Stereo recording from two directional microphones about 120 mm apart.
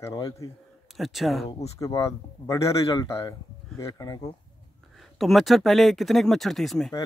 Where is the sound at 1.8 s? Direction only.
25° left (ahead or behind).